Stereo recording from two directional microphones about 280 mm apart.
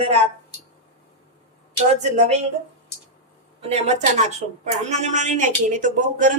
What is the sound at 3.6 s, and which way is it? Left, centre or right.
Speech, right.